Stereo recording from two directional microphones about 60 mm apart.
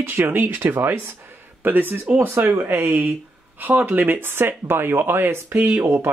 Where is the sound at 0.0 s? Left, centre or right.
Right.